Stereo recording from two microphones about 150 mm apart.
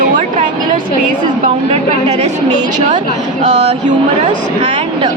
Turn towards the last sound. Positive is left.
turn(degrees=-35)  # may be behind; listen again after turning